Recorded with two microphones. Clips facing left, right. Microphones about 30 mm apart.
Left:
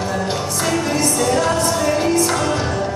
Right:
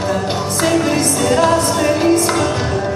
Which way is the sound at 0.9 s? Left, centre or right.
Right.